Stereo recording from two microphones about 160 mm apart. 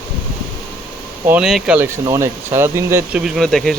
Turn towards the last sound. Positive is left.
turn(degrees=5)  # may be behind; listen again after turning